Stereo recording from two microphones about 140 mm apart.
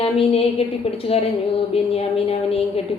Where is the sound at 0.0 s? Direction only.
45° left (ahead or behind).